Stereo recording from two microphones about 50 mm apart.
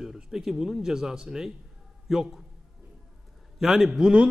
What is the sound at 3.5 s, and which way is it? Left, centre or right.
Speech, centre.